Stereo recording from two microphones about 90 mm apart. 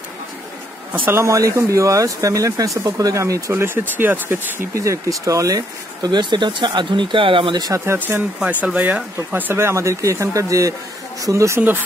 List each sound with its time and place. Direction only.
0.9 s speech: 20° right (ahead or behind)
1.2 s speech: 35° right (ahead or behind)
3.5 s speech: 25° right (ahead or behind)
4.7 s speech: 35° right (ahead or behind)
6.0 s speech: 55° right (ahead or behind); by 7.5 s 75° right (ahead or behind)
7.5 s speech: 45° right (ahead or behind)
7.8 s speech: 30° right (ahead or behind)
8.4 s speech: 15° right (ahead or behind); by 11.6 s 35° right (ahead or behind)